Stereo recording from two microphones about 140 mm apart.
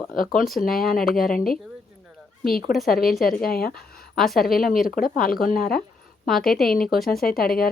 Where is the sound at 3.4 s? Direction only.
90° left.